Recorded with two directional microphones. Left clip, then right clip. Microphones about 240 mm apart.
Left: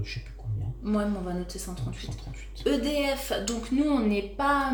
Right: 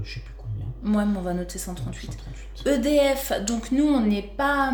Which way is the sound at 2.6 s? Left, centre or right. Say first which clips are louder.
Right 6 dB; right.